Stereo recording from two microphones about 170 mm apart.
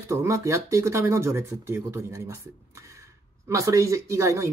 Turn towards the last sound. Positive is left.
turn(degrees=-15)  # may be behind; listen again after turning